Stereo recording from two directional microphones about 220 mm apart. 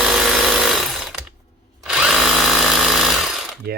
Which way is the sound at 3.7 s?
45° right (ahead or behind).